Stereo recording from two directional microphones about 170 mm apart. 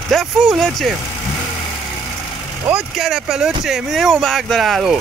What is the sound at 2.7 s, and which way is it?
Speech, 5° right (ahead or behind).